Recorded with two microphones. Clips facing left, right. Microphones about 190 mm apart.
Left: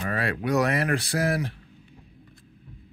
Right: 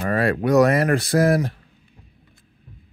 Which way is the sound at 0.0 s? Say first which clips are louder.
Right 7 dB; 45° right (ahead or behind).